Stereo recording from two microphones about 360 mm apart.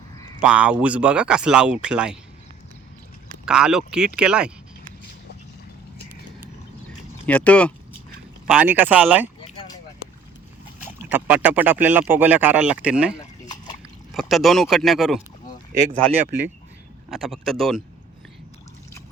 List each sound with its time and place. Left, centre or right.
0.4 s speech: centre
3.4 s speech: centre
7.3 s speech: centre
11.1 s speech: centre
16.2 s speech: right
17.1 s speech: centre